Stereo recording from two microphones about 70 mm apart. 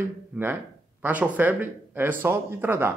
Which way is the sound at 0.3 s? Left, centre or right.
Centre.